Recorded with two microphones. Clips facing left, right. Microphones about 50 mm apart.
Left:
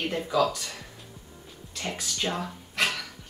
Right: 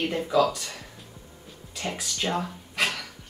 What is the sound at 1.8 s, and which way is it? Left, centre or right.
Speech, centre.